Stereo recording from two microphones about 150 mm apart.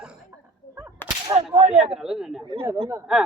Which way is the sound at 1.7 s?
5° right (ahead or behind).